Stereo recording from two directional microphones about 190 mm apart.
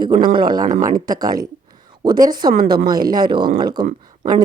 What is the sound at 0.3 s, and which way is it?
A woman's voice, 20° right (ahead or behind).